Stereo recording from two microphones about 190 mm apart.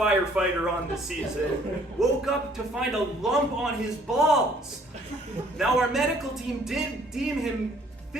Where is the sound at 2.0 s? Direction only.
Centre (ahead or behind).